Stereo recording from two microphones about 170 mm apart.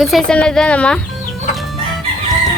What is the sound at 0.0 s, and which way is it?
Speech, centre (ahead or behind).